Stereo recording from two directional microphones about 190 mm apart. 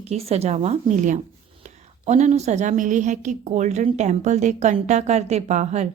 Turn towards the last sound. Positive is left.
turn(degrees=-35)  # may be behind; listen again after turning